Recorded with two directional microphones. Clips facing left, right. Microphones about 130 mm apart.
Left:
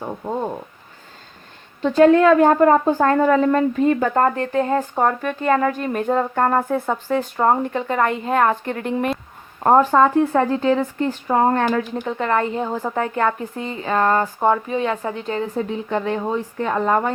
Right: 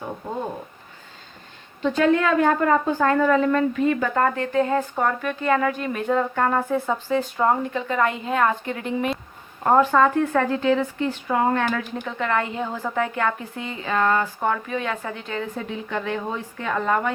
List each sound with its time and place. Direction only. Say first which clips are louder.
1.8 s speech: left 7 dB; 40° left (ahead or behind)
9.6 s speech: left 3 dB; 35° left (ahead or behind)